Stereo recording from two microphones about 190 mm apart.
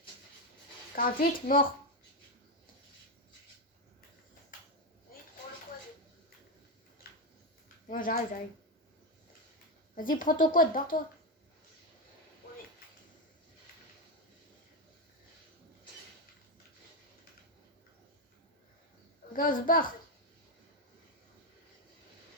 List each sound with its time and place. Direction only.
0.9 s speech: 50° left (ahead or behind)
7.9 s speech: 45° left (ahead or behind)
9.9 s speech: 45° left (ahead or behind)
19.3 s a woman's voice: 45° left (ahead or behind)